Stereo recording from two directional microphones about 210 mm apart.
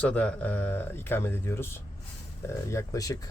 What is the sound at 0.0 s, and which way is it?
Speech, 5° left (ahead or behind).